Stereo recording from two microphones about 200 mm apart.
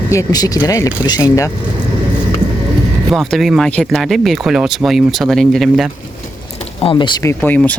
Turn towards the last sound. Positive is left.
turn(degrees=10)  # may be behind; listen again after turning